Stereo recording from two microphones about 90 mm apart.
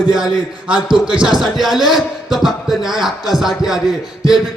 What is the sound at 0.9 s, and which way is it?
Speech, 65° right (ahead or behind).